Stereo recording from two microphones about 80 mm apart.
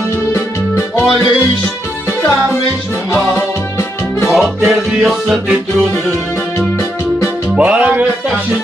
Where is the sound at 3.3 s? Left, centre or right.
Left.